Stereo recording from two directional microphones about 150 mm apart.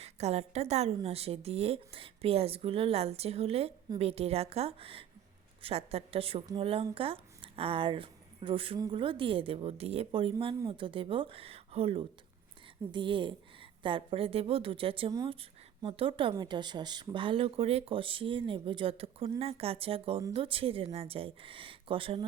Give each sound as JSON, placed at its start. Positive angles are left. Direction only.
{"t": 0.0, "sound": "a woman's voice", "side_deg": -45}